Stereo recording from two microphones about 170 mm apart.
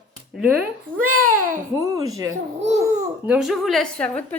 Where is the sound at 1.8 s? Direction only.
20° right (ahead or behind).